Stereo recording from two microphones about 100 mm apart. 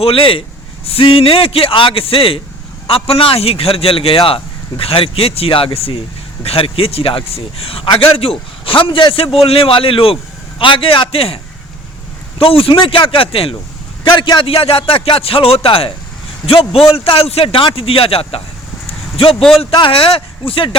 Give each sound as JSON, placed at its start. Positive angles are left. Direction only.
{"t": 0.0, "sound": "a man's voice", "side_deg": 65}
{"t": 12.4, "sound": "a man's voice", "side_deg": 70}
{"t": 14.0, "sound": "a man's voice", "side_deg": 55}
{"t": 18.9, "sound": "a sound", "side_deg": 70}
{"t": 19.4, "sound": "a man's voice", "side_deg": 5}
{"t": 19.7, "sound": "a man's voice", "side_deg": 60}